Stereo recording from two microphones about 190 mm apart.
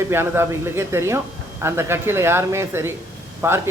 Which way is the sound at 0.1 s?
10° right (ahead or behind).